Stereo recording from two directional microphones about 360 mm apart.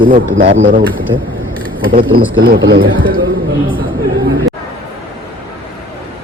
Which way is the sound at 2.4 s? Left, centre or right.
Right.